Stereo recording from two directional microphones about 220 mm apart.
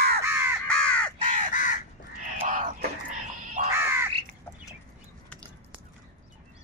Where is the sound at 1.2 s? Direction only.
35° right (ahead or behind).